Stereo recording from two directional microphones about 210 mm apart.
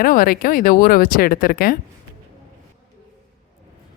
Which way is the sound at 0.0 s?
45° left (ahead or behind).